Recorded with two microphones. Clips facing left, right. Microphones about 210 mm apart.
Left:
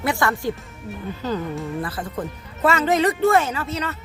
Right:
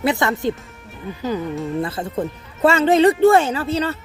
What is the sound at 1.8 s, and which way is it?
Speech, 25° right (ahead or behind).